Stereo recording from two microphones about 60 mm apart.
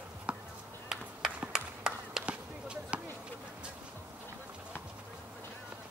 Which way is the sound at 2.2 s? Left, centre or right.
Centre.